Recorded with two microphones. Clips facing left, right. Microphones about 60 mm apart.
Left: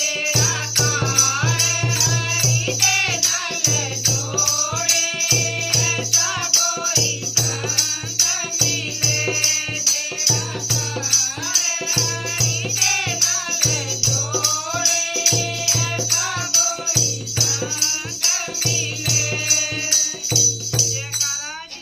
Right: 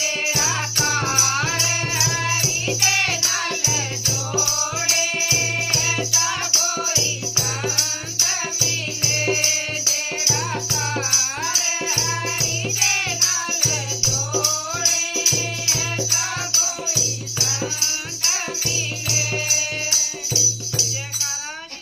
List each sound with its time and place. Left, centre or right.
0.3 s music: right
8.5 s music: right
15.4 s music: right